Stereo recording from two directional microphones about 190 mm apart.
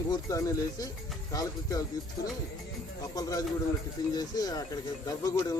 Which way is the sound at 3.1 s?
20° left (ahead or behind).